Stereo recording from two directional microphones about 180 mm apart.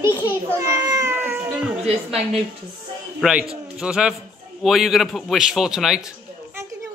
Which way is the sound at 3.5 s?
5° right (ahead or behind).